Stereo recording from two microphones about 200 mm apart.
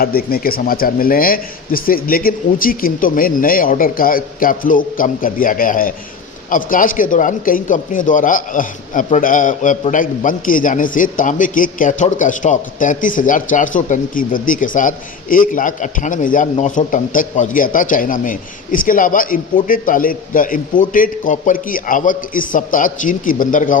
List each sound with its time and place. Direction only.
0.0 s a man's voice: 50° left (ahead or behind)